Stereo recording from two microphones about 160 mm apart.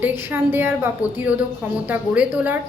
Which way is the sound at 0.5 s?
15° right (ahead or behind).